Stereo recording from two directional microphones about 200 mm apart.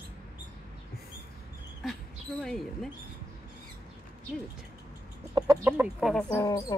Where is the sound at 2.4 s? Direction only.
Centre (ahead or behind).